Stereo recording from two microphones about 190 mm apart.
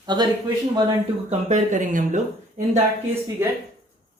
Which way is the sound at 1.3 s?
35° right (ahead or behind).